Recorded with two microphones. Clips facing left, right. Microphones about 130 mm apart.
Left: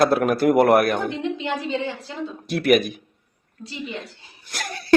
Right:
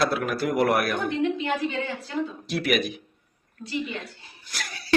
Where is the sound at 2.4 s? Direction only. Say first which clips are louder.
Left 9 dB; 55° left (ahead or behind).